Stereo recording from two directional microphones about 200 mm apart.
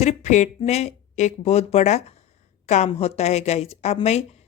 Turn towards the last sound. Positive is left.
turn(degrees=35)  # may be behind; listen again after turning